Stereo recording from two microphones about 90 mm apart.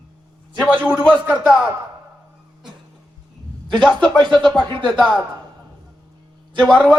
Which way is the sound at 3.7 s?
10° left (ahead or behind).